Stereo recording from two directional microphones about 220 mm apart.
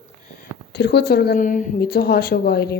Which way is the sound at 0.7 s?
50° left (ahead or behind).